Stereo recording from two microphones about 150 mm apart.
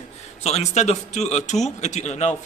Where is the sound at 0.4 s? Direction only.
50° left (ahead or behind).